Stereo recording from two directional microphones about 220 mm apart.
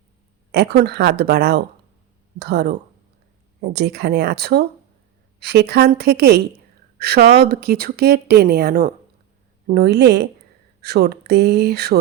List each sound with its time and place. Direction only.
0.5 s speech: 50° right (ahead or behind)